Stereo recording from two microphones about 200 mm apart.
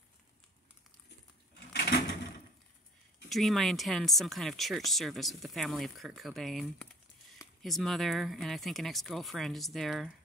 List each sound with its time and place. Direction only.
1.7 s drawer open or close: 55° left (ahead or behind)
3.3 s speech: centre (ahead or behind)